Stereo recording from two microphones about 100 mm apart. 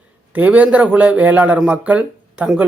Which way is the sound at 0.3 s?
15° right (ahead or behind).